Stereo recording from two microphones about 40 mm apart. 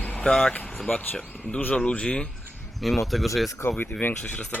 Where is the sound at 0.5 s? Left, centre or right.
Left.